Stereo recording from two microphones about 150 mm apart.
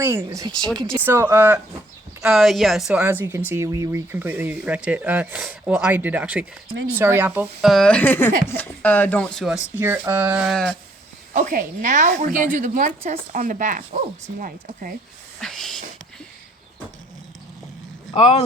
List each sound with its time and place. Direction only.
0.0 s speech: 15° right (ahead or behind)
2.2 s a woman's voice: centre (ahead or behind)
3.0 s speech: 15° right (ahead or behind)
7.7 s speech: 5° left (ahead or behind)
9.7 s speech: 15° right (ahead or behind)
10.5 s a woman's voice: 5° left (ahead or behind)
11.3 s a woman's voice: 60° right (ahead or behind)
13.9 s speech: 45° right (ahead or behind)
14.4 s a woman's voice: 65° right (ahead or behind)
15.4 s a sound: centre (ahead or behind)
18.1 s speech: 40° left (ahead or behind)